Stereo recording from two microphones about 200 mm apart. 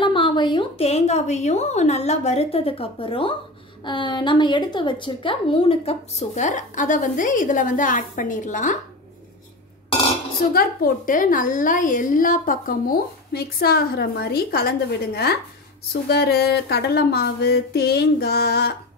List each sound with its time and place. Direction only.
0.0 s a woman's voice: 25° left (ahead or behind); by 8.7 s 40° left (ahead or behind)
10.5 s a woman's voice: 50° left (ahead or behind)